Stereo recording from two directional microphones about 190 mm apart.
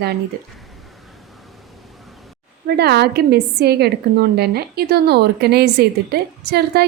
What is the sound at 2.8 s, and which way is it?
A woman's voice, 60° right (ahead or behind).